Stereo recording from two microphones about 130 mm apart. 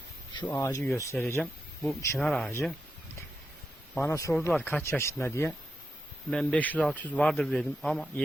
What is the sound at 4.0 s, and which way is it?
Speech, 25° left (ahead or behind).